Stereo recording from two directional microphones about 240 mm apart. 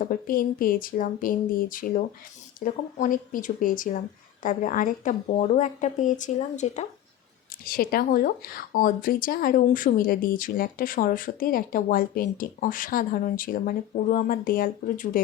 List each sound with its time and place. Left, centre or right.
0.0 s speech: left